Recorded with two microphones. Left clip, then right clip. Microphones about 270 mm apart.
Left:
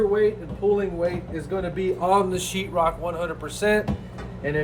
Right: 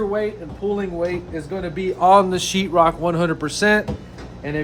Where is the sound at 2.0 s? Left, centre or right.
Right.